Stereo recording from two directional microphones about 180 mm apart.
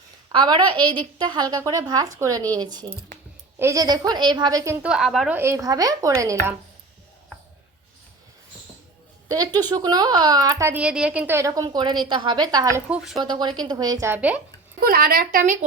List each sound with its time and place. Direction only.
0.3 s a woman's voice: 25° right (ahead or behind); by 5.4 s centre (ahead or behind)
5.4 s a woman's voice: 15° right (ahead or behind)
9.3 s speech: 20° right (ahead or behind)
12.9 s speech: centre (ahead or behind)
13.2 s a woman's voice: 25° right (ahead or behind); by 14.4 s 10° right (ahead or behind)
14.8 s speech: 55° right (ahead or behind)